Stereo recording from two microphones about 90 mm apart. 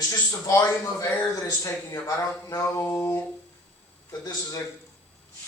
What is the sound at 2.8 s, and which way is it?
Music, 20° left (ahead or behind).